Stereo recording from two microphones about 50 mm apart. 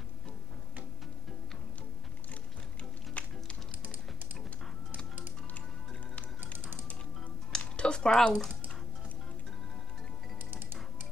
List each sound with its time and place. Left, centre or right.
2.8 s music: left
6.6 s music: right
7.5 s a sound: centre